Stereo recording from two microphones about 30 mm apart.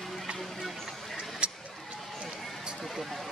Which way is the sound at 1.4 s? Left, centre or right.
Right.